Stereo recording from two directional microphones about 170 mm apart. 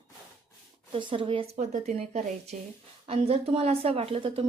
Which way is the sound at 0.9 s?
30° right (ahead or behind).